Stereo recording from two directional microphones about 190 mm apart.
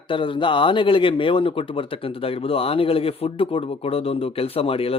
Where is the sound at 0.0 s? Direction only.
25° left (ahead or behind).